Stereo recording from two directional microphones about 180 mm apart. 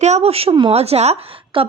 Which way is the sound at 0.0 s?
35° right (ahead or behind).